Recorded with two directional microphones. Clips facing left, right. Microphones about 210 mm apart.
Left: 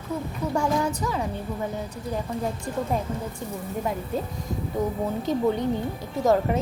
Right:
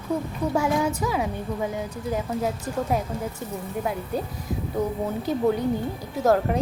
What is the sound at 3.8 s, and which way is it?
Speech, 5° right (ahead or behind).